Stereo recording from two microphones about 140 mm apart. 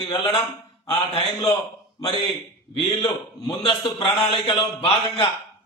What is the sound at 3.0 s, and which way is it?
A man's voice, 35° left (ahead or behind).